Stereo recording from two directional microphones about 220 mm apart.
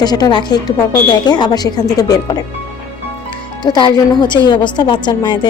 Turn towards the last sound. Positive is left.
turn(degrees=20)  # may be behind; listen again after turning